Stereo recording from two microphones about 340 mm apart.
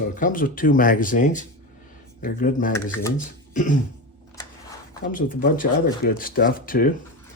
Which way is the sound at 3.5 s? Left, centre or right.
Left.